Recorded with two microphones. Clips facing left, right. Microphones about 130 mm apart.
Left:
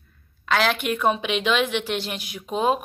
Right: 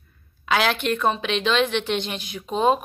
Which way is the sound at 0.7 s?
10° left (ahead or behind).